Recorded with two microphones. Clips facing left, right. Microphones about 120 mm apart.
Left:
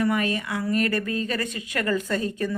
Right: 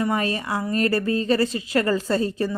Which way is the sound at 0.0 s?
35° right (ahead or behind).